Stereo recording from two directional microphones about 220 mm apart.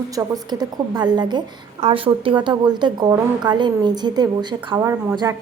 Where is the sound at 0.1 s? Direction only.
15° right (ahead or behind).